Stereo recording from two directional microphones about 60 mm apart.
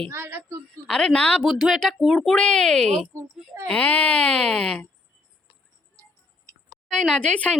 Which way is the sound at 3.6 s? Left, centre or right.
Left.